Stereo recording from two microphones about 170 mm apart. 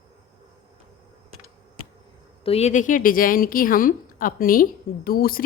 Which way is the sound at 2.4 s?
35° left (ahead or behind).